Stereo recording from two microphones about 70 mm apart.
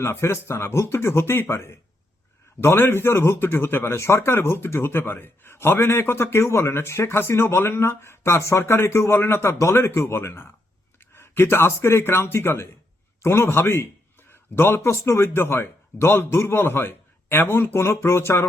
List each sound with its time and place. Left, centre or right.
0.0 s speech: left